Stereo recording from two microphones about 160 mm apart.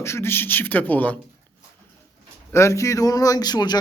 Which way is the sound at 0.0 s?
15° left (ahead or behind).